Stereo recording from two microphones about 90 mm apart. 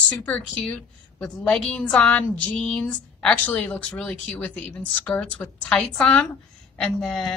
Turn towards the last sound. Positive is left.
turn(degrees=5)  # may be behind; listen again after turning